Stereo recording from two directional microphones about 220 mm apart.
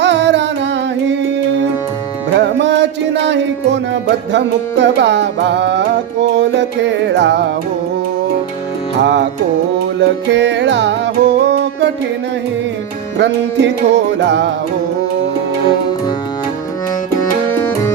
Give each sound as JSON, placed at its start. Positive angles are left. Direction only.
{"t": 0.0, "sound": "music", "side_deg": -55}
{"t": 2.3, "sound": "music", "side_deg": -50}
{"t": 9.0, "sound": "music", "side_deg": -50}
{"t": 13.1, "sound": "music", "side_deg": -50}